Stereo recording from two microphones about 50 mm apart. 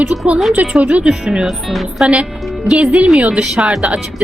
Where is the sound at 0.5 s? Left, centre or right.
Right.